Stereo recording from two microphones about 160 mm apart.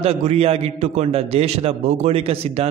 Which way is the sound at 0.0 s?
40° right (ahead or behind).